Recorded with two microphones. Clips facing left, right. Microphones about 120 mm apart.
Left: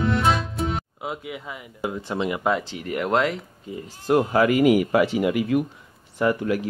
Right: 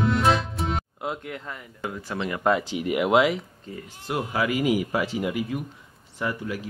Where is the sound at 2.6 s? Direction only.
15° right (ahead or behind).